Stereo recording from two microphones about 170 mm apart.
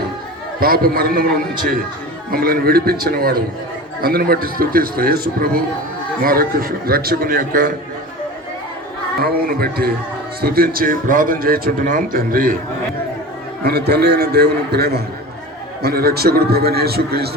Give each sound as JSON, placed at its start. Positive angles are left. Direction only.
{"t": 0.6, "sound": "a man's voice", "side_deg": -60}
{"t": 9.2, "sound": "a man's voice", "side_deg": -65}
{"t": 13.7, "sound": "a man's voice", "side_deg": -70}